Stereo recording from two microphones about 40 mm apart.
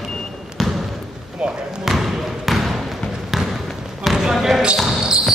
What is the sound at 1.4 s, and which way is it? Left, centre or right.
Speech, centre.